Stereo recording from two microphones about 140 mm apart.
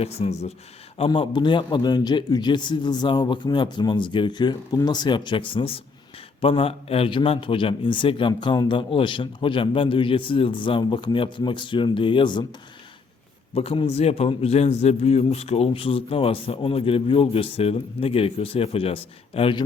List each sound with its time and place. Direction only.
0.0 s a man's voice: 50° left (ahead or behind)
0.9 s a man's voice: 40° left (ahead or behind)
13.5 s a man's voice: 45° left (ahead or behind)